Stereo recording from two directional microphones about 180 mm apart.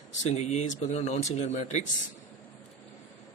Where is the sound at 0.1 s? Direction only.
40° left (ahead or behind).